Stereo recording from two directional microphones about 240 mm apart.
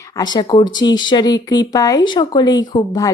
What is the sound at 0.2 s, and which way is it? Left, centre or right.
Speech, centre.